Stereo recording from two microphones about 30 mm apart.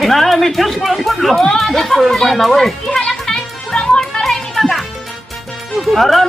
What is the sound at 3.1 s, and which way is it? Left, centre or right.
Music, centre.